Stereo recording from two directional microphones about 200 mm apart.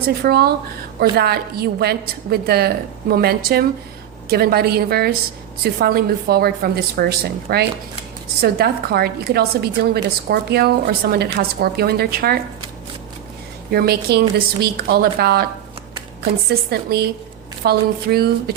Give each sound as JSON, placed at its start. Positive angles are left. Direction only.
{"t": 0.2, "sound": "a woman's voice", "side_deg": -50}
{"t": 13.7, "sound": "a woman's voice", "side_deg": -50}
{"t": 16.6, "sound": "a woman's voice", "side_deg": -55}